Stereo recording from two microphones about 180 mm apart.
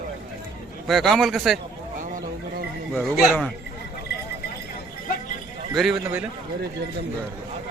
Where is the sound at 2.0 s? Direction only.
50° right (ahead or behind).